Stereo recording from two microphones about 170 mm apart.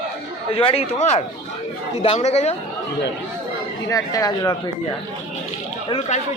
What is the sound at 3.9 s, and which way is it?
Speech, 20° left (ahead or behind).